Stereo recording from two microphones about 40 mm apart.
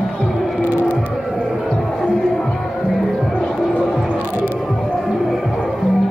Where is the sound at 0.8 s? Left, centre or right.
Left.